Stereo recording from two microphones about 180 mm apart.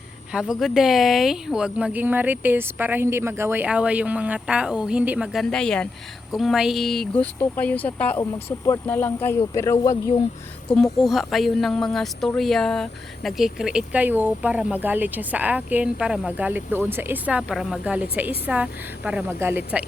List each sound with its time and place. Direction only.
0.3 s speech: 5° right (ahead or behind); by 9.9 s 20° left (ahead or behind)
10.9 s speech: centre (ahead or behind)